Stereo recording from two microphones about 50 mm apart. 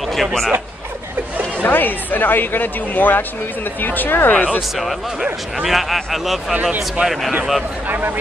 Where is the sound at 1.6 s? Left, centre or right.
Left.